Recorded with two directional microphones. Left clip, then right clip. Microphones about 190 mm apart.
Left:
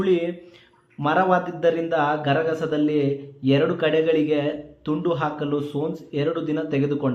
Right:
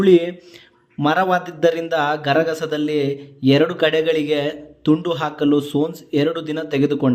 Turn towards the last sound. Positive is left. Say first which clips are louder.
# right 5 dB
turn(degrees=-45)  # may be behind; listen again after turning